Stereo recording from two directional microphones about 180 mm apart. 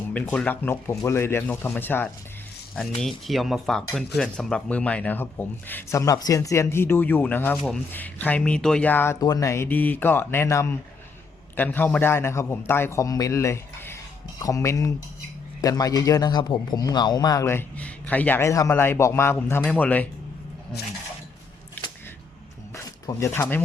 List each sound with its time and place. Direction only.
0.1 s speech: 10° left (ahead or behind)
3.0 s speech: centre (ahead or behind)
22.7 s a sound: 15° left (ahead or behind)